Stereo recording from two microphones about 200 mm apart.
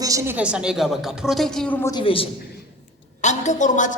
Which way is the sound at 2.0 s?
25° left (ahead or behind).